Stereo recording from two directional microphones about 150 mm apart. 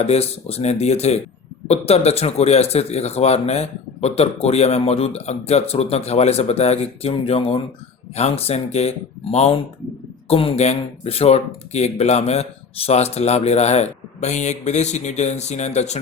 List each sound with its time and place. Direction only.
0.0 s speech: 45° left (ahead or behind)